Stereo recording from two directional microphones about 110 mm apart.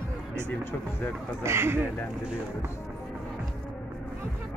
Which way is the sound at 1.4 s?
20° right (ahead or behind).